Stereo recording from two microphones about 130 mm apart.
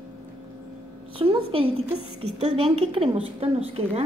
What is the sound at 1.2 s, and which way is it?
A woman's voice, 45° right (ahead or behind).